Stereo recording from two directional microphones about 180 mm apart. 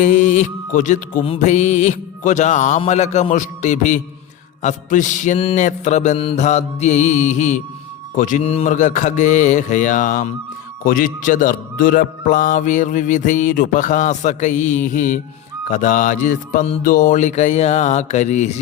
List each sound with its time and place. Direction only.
0.0 s music: 45° left (ahead or behind)
8.1 s a man's voice: 45° left (ahead or behind)
16.8 s music: 50° left (ahead or behind)